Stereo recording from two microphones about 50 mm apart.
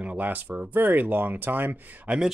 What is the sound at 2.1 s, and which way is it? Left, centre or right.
Speech, right.